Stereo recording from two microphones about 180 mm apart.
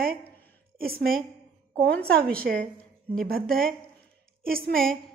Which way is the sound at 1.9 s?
5° left (ahead or behind).